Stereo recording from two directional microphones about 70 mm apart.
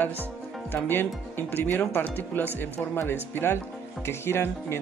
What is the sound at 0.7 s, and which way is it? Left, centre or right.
Speech, left.